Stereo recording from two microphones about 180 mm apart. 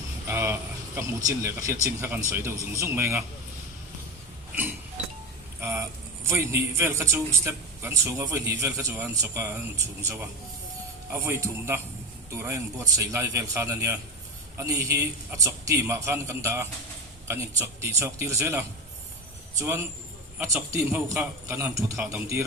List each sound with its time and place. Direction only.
0.3 s speech: 15° right (ahead or behind)
5.6 s a man's voice: 15° right (ahead or behind)